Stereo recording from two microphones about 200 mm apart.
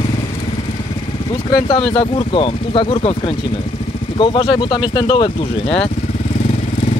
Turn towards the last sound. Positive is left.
turn(degrees=20)  # may be behind; listen again after turning